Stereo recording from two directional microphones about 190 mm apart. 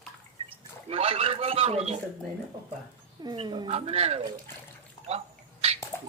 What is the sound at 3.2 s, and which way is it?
A woman's voice, 20° right (ahead or behind).